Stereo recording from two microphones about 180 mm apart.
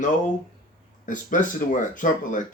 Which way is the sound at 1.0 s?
45° left (ahead or behind).